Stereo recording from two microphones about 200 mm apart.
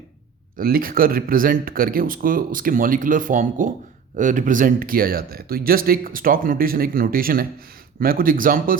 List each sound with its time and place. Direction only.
0.6 s speech: 45° right (ahead or behind)